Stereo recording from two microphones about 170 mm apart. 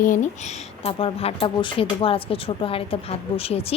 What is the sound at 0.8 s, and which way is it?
Speech, 35° left (ahead or behind).